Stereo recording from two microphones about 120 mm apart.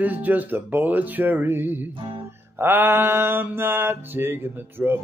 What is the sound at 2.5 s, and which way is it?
Mantra, 20° right (ahead or behind).